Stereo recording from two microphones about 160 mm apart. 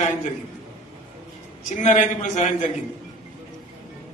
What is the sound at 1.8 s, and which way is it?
Speech, 50° left (ahead or behind).